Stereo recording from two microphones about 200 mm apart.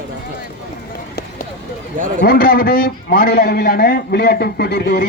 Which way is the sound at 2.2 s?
50° left (ahead or behind).